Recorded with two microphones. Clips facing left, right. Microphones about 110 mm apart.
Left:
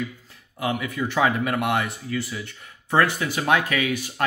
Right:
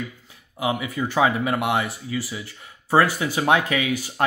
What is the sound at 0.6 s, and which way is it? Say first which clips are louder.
Speech: right 1 dB; 25° right (ahead or behind).